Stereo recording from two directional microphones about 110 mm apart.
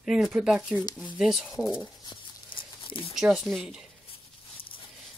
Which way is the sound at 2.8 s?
50° left (ahead or behind).